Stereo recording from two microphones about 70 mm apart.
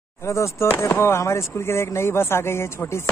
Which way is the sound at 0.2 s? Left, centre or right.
Left.